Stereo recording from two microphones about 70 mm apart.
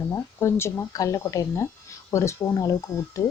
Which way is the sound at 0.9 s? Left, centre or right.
Left.